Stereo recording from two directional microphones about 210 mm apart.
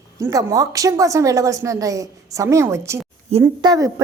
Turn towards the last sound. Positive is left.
turn(degrees=-15)  # may be behind; listen again after turning